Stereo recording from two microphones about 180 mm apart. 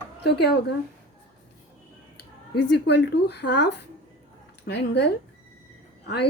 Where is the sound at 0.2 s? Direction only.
65° left (ahead or behind).